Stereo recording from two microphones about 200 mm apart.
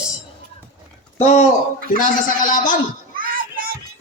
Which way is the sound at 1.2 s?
30° left (ahead or behind).